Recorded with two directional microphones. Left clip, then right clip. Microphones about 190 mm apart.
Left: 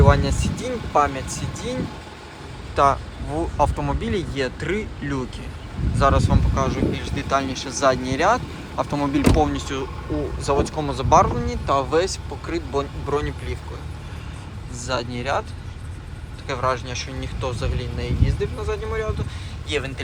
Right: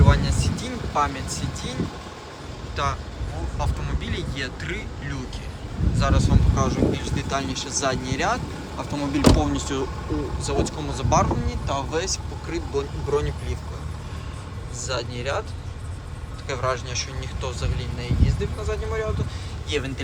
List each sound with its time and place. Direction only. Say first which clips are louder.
0.1 s speech: left 4 dB; 5° left (ahead or behind)
2.7 s speech: left 9 dB; 5° left (ahead or behind)
6.5 s speech: right 1 dB; 15° right (ahead or behind)
10.4 s speech: left 7 dB; 5° right (ahead or behind)
13.1 s speech: even; 15° right (ahead or behind)
14.8 s speech: left 3 dB; 5° right (ahead or behind)
16.5 s speech: left 3 dB; 10° right (ahead or behind)